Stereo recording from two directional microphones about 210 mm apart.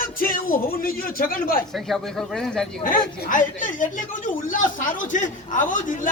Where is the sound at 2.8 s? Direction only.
40° left (ahead or behind).